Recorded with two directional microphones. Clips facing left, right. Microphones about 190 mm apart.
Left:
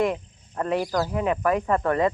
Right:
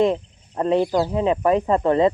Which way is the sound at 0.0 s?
25° right (ahead or behind).